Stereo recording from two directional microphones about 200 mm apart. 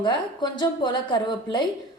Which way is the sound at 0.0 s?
20° left (ahead or behind).